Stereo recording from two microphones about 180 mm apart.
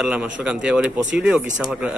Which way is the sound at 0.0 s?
5° right (ahead or behind).